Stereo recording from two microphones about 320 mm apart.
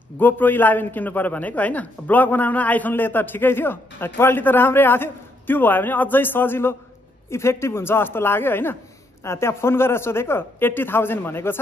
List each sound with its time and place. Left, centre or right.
0.2 s a man's voice: centre